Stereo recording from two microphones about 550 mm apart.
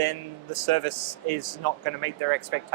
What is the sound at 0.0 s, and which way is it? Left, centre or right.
Speech, right.